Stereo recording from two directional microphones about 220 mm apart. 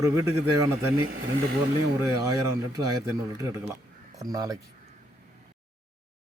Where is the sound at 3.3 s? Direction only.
15° right (ahead or behind).